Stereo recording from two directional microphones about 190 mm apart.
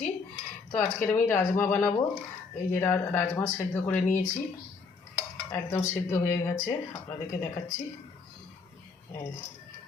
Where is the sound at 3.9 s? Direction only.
40° left (ahead or behind).